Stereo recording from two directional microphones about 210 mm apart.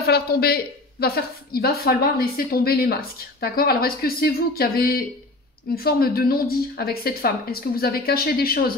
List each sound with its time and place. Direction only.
0.0 s a woman's voice: 45° left (ahead or behind)